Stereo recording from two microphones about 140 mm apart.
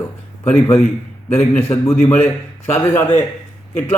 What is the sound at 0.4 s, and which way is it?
A man's voice, 15° left (ahead or behind).